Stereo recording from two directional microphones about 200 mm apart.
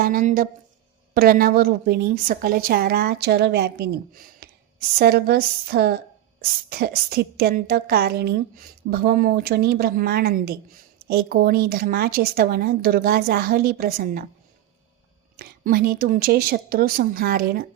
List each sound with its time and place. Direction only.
0.0 s a woman's voice: 45° right (ahead or behind)
15.4 s a woman's voice: 50° right (ahead or behind)